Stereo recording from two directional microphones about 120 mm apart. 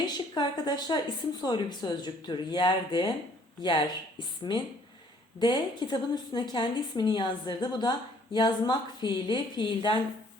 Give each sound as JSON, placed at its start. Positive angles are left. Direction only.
{"t": 0.0, "sound": "a woman's voice", "side_deg": 35}
{"t": 4.5, "sound": "a woman's voice", "side_deg": 35}